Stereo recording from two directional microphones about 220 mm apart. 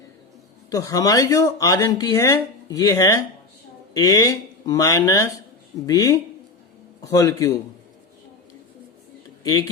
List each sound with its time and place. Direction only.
0.7 s speech: 15° left (ahead or behind)
9.4 s speech: 15° left (ahead or behind)